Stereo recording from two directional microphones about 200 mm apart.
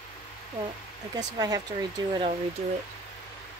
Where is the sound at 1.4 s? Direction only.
20° right (ahead or behind).